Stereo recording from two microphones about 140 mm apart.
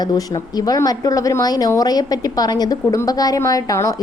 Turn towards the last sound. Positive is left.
turn(degrees=25)  # may be behind; listen again after turning